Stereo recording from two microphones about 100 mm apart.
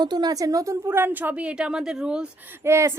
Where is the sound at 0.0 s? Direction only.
45° right (ahead or behind); by 2.2 s 10° right (ahead or behind).